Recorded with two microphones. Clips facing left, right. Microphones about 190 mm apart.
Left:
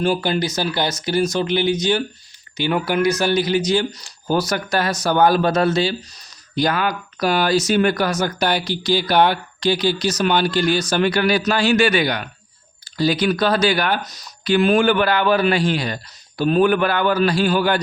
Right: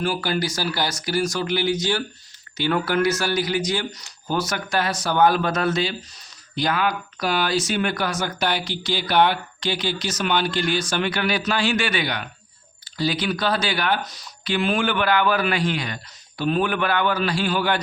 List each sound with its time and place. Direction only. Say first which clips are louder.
0.0 s speech: left 4 dB; 25° left (ahead or behind); by 17.7 s 40° left (ahead or behind)